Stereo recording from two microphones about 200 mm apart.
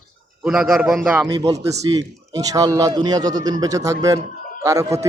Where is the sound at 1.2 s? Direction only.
20° right (ahead or behind).